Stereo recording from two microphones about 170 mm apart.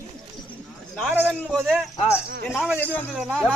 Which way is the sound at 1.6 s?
5° right (ahead or behind).